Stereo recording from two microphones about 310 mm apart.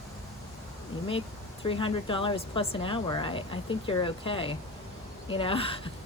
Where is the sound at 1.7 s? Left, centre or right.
Centre.